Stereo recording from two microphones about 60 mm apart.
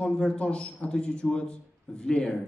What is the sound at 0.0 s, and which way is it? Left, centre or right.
A man's voice, centre.